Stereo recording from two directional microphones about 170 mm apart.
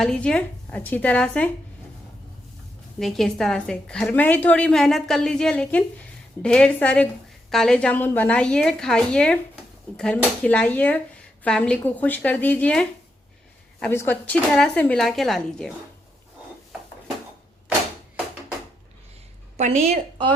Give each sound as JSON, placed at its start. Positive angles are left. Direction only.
{"t": 0.0, "sound": "a woman's voice", "side_deg": 5}
{"t": 3.0, "sound": "a woman's voice", "side_deg": 0}
{"t": 13.9, "sound": "a woman's voice", "side_deg": 10}
{"t": 19.9, "sound": "a woman's voice", "side_deg": -30}